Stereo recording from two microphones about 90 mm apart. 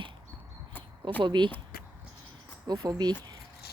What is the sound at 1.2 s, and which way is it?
Speech, 60° right (ahead or behind).